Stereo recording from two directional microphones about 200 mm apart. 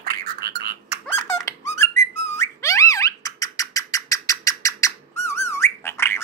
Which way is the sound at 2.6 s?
15° left (ahead or behind).